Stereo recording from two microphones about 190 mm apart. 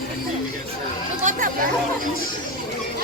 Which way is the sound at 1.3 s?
40° right (ahead or behind).